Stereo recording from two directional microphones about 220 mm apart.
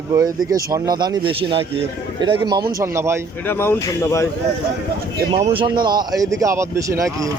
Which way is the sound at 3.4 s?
10° left (ahead or behind).